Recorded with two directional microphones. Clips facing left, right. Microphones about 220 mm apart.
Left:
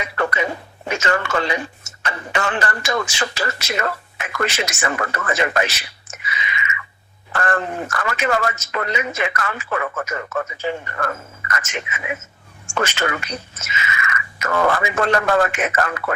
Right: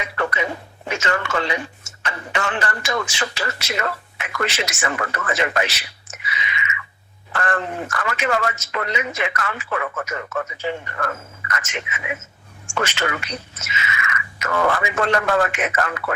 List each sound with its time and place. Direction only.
0.2 s music: 40° left (ahead or behind)
0.9 s a woman's voice: 45° left (ahead or behind)